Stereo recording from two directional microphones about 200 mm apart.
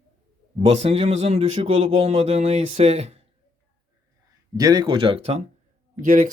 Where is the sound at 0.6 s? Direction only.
30° right (ahead or behind).